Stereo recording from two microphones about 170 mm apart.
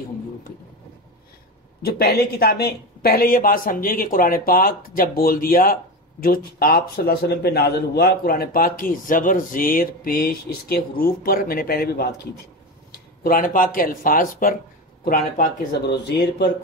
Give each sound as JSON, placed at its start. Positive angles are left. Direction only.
{"t": 1.9, "sound": "a man's voice", "side_deg": 65}
{"t": 13.2, "sound": "a man's voice", "side_deg": 55}
{"t": 16.1, "sound": "speech", "side_deg": 90}